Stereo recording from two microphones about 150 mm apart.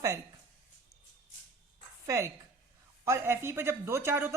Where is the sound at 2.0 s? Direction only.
20° right (ahead or behind).